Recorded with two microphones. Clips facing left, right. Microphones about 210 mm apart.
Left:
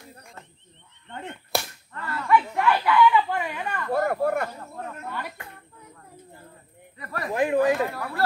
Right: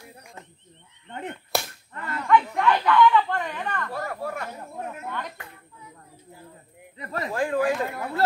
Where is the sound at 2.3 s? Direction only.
5° left (ahead or behind).